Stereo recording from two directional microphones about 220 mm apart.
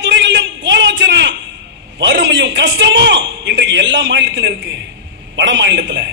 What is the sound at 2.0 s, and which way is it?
A man's voice, 55° right (ahead or behind).